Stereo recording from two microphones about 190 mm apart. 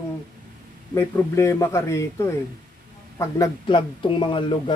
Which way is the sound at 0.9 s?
15° left (ahead or behind).